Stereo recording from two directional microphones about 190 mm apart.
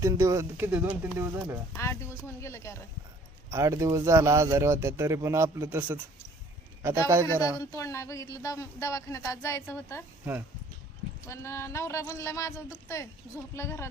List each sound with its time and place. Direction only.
0.0 s speech: 15° right (ahead or behind)
1.7 s speech: 15° left (ahead or behind)
3.5 s speech: 15° right (ahead or behind)
7.1 s speech: 15° right (ahead or behind)
7.6 s speech: 15° left (ahead or behind)
11.3 s speech: 15° left (ahead or behind)